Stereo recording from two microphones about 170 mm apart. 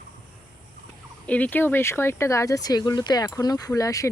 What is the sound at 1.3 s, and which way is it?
Speech, 10° left (ahead or behind).